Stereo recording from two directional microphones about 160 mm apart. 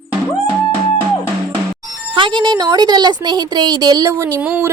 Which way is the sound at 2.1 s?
30° right (ahead or behind).